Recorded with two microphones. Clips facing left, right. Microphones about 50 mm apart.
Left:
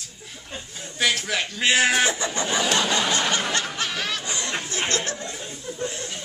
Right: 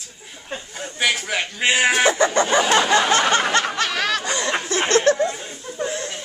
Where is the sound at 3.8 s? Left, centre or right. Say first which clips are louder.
Right 6 dB; right.